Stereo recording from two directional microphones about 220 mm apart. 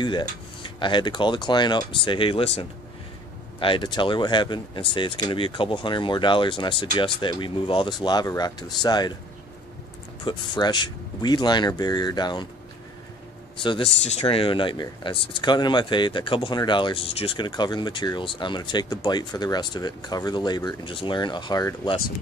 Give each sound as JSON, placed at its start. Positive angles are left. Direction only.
{"t": 0.0, "sound": "speech", "side_deg": 20}
{"t": 10.2, "sound": "speech", "side_deg": 20}
{"t": 13.6, "sound": "speech", "side_deg": 25}